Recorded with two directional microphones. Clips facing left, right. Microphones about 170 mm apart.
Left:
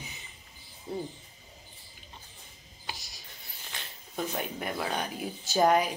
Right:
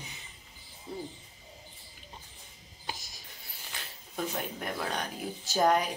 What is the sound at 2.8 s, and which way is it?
Music, 50° right (ahead or behind).